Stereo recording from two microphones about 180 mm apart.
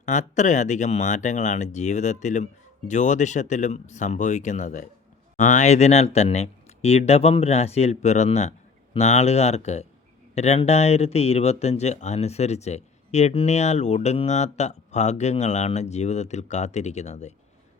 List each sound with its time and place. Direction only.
0.0 s speech: 40° left (ahead or behind)